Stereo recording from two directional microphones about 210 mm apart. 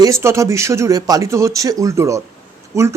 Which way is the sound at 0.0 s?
15° right (ahead or behind).